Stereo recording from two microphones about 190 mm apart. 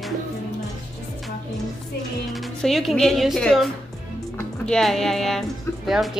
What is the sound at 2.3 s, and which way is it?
Speech, centre (ahead or behind).